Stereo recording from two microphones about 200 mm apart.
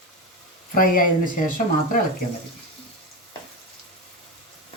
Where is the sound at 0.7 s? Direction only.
45° left (ahead or behind).